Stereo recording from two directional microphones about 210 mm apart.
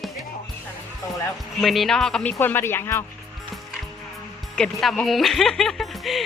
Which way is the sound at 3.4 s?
Centre (ahead or behind).